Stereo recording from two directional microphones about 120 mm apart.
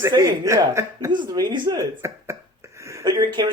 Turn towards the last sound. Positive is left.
turn(degrees=-40)  # may be behind; listen again after turning